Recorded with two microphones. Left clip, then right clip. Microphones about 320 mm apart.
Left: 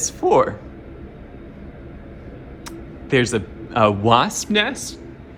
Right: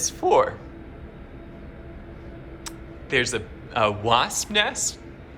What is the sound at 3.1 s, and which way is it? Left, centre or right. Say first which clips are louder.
Speech: left 4 dB; centre.